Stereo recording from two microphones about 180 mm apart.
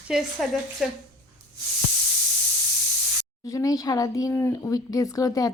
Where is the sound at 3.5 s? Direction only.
20° left (ahead or behind).